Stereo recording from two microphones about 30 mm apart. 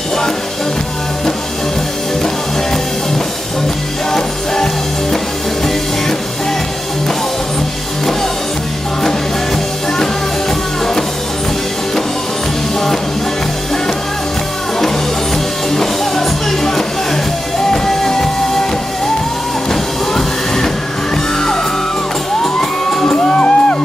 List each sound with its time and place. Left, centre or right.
15.7 s music: centre
19.7 s music: centre
22.4 s music: centre
23.3 s music: left